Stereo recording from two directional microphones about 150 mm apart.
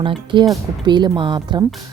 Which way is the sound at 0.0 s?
35° right (ahead or behind).